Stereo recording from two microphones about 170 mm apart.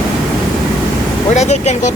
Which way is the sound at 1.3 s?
40° left (ahead or behind).